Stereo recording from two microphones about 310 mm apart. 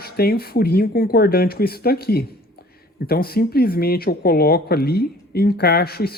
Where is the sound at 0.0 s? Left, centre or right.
Left.